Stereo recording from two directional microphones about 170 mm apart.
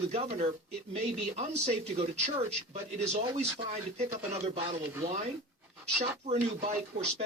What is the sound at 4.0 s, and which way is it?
Speech, 40° right (ahead or behind).